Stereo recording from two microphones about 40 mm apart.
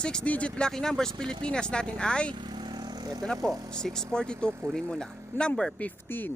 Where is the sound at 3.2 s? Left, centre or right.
Centre.